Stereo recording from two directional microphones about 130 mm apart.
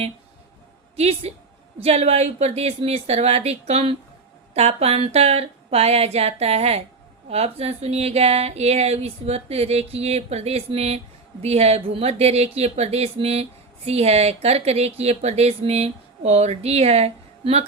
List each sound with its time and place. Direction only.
0.9 s speech: 55° right (ahead or behind)